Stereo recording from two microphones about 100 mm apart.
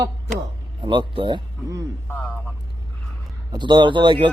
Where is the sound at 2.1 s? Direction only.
15° left (ahead or behind).